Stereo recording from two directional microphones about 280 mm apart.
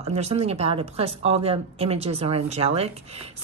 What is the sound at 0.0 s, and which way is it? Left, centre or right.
Speech, right.